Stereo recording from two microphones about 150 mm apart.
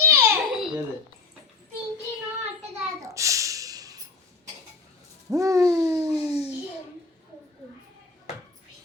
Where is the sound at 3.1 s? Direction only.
20° right (ahead or behind).